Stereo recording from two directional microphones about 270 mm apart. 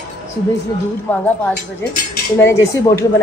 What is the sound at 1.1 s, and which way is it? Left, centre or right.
Speech, centre.